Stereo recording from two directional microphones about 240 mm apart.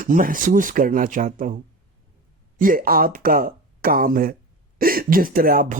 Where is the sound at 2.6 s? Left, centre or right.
Right.